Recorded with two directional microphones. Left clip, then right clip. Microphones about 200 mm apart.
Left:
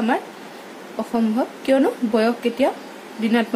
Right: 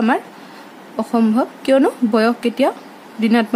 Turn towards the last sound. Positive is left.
turn(degrees=-30)  # may be behind; listen again after turning